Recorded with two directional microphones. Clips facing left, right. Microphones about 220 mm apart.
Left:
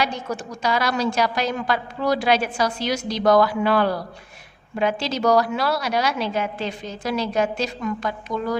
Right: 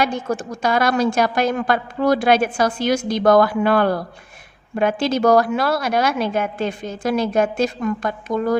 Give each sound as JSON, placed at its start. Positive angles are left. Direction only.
{"t": 0.0, "sound": "a woman's voice", "side_deg": -50}